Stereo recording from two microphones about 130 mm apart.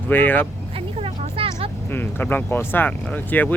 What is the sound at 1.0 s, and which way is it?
Vehicle, 45° right (ahead or behind).